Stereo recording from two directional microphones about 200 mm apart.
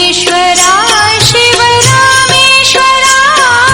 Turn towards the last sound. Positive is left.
turn(degrees=0)  # may be behind; listen again after turning